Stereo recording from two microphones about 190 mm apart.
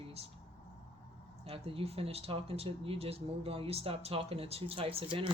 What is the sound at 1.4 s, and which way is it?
Speech, 30° right (ahead or behind).